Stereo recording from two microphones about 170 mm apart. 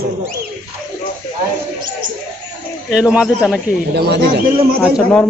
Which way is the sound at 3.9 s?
70° right (ahead or behind).